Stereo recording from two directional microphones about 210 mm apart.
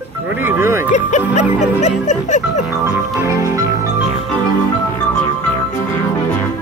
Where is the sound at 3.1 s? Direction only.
15° right (ahead or behind).